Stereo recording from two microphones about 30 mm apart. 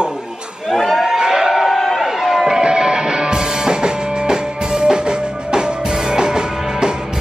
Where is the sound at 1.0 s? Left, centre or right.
Centre.